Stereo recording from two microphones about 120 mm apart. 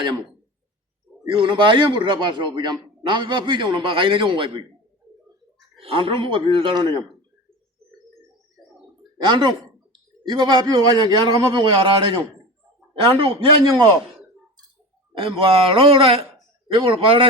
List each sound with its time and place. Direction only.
1.3 s a man's voice: 45° right (ahead or behind)
5.7 s a man's voice: 50° right (ahead or behind)
9.1 s speech: 40° right (ahead or behind)
12.9 s a man's voice: 50° right (ahead or behind)
15.1 s a man's voice: 50° right (ahead or behind)